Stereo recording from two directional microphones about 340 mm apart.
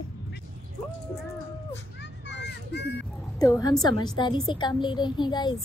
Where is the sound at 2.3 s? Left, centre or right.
Left.